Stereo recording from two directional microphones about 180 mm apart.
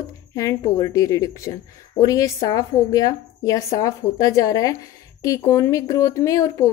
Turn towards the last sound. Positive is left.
turn(degrees=20)  # may be behind; listen again after turning